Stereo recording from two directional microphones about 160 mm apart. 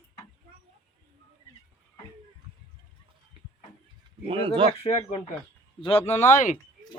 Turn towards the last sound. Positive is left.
turn(degrees=50)  # may be behind; listen again after turning